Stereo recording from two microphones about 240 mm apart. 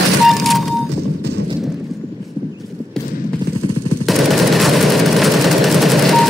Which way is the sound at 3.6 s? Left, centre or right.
Right.